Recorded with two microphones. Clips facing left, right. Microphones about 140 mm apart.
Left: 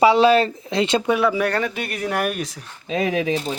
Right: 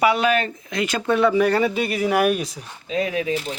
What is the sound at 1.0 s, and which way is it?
Speech, 5° left (ahead or behind).